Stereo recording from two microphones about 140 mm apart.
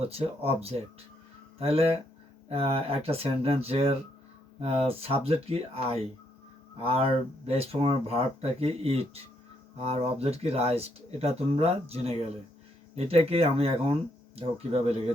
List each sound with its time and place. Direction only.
0.0 s speech: 45° right (ahead or behind)